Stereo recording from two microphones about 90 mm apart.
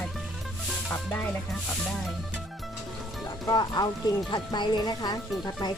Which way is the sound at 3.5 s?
50° left (ahead or behind).